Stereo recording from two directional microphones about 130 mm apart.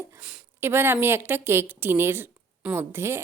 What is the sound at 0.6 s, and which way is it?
A woman's voice, 15° right (ahead or behind).